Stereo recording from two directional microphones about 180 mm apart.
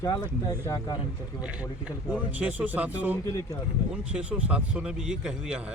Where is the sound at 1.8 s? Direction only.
10° right (ahead or behind).